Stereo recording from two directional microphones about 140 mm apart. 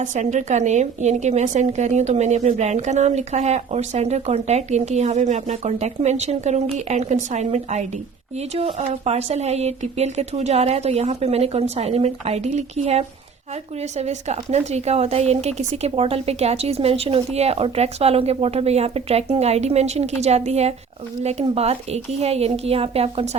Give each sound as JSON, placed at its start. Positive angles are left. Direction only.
{"t": 0.0, "sound": "a woman's voice", "side_deg": -60}